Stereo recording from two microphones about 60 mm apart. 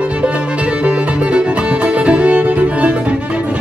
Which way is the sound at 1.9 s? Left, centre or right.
Right.